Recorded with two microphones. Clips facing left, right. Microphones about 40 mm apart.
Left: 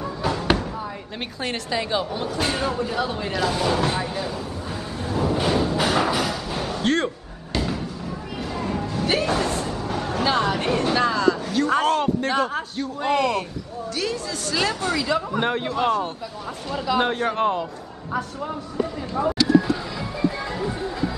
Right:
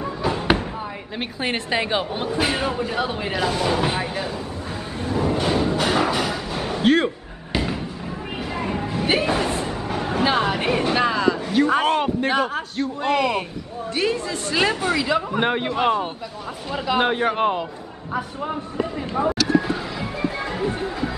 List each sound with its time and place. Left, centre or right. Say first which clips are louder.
0.0 s a sound: right 1 dB; centre
1.4 s a woman's voice: right 3 dB; right
2.3 s speech: right 2 dB; centre
3.4 s speech: even; centre
5.0 s music: right 1 dB; centre
7.5 s a sound: right 1 dB; right
13.9 s speech: right 5 dB; right
19.2 s speech: right 1 dB; right
19.5 s music: left 2 dB; right